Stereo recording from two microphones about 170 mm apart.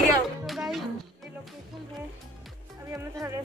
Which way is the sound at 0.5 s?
Centre (ahead or behind).